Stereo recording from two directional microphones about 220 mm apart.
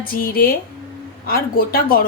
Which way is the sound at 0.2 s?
40° left (ahead or behind).